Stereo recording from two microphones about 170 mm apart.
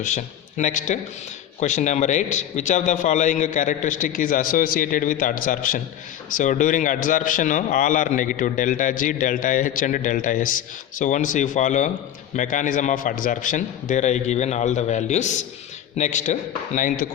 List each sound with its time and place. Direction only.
0.0 s a man's voice: 45° left (ahead or behind)